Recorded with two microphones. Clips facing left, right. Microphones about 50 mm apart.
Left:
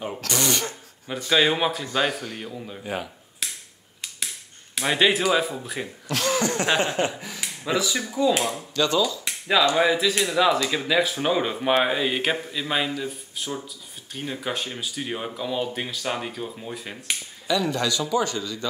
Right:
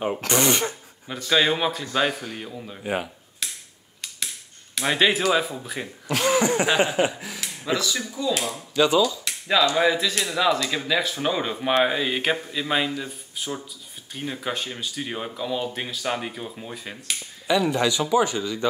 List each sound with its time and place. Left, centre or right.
0.1 s speech: right
1.2 s speech: centre
2.8 s a man's voice: centre
3.4 s finger snapping: centre
4.7 s speech: centre
8.7 s speech: centre
9.8 s speech: centre
17.5 s a man's voice: centre